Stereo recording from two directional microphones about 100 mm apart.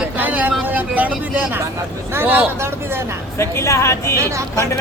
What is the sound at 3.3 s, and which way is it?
Speech, 30° left (ahead or behind).